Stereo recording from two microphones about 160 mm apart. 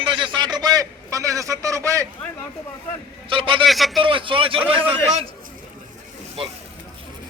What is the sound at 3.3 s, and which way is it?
Speech, 35° right (ahead or behind).